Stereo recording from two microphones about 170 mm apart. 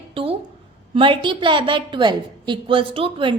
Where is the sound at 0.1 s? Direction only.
30° right (ahead or behind).